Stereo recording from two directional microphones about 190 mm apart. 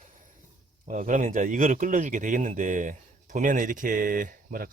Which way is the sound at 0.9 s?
45° right (ahead or behind).